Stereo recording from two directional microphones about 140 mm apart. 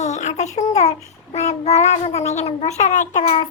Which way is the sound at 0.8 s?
50° left (ahead or behind).